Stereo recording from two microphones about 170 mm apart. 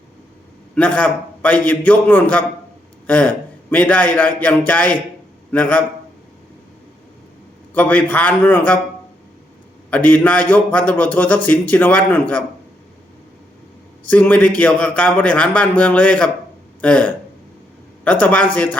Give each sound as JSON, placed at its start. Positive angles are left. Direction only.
{"t": 0.8, "sound": "a man's voice", "side_deg": 5}
{"t": 7.7, "sound": "a man's voice", "side_deg": 10}
{"t": 9.9, "sound": "a man's voice", "side_deg": 10}
{"t": 14.0, "sound": "a man's voice", "side_deg": 10}